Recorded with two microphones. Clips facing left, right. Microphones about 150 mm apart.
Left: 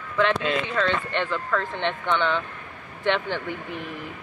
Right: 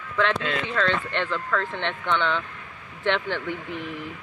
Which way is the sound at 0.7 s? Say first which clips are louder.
Left 1 dB; 10° left (ahead or behind).